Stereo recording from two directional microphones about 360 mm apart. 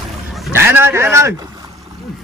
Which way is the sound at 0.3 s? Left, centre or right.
Centre.